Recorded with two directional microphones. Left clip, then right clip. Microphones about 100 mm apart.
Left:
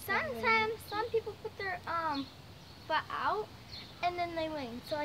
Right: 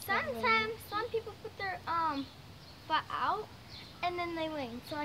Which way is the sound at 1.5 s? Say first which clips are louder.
Right 2 dB; 5° left (ahead or behind).